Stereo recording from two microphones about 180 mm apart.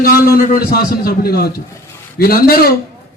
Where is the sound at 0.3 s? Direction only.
55° left (ahead or behind).